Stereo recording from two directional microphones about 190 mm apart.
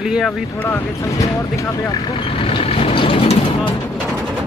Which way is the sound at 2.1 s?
30° left (ahead or behind).